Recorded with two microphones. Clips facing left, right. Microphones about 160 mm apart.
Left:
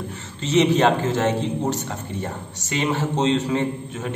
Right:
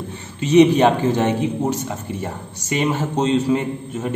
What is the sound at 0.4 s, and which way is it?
A man's voice, 15° right (ahead or behind).